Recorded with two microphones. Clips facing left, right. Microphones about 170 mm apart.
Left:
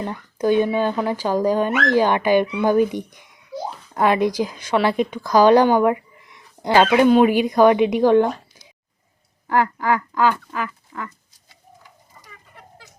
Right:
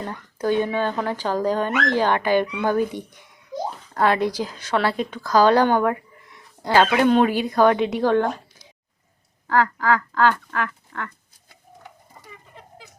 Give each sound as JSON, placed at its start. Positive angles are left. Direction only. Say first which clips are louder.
{"t": 0.0, "sound": "speech", "louder": "left 4 dB", "side_deg": 15}
{"t": 9.5, "sound": "speech", "louder": "even", "side_deg": 20}